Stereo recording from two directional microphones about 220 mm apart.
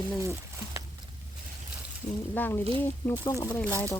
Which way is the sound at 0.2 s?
15° right (ahead or behind).